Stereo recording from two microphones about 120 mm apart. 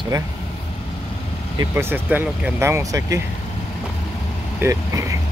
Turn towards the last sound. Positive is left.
turn(degrees=-25)  # may be behind; listen again after turning